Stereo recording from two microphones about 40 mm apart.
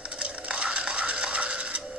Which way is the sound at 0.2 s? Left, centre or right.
Right.